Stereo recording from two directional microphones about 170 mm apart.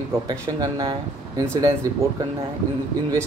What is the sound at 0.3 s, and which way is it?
Speech, 25° right (ahead or behind).